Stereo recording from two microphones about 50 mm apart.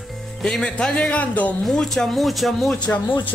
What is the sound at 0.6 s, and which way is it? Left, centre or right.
Speech, left.